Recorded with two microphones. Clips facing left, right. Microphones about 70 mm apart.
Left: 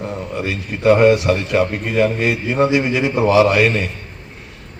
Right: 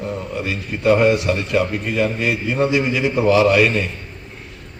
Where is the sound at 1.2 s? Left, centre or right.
Left.